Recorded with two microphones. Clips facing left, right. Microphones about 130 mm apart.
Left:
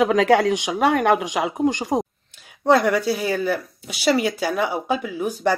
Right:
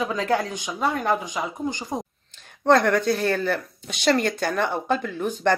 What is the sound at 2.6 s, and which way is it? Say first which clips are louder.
Speech: left 1 dB; 10° left (ahead or behind).